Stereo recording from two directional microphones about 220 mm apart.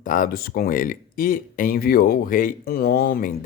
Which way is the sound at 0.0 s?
35° left (ahead or behind).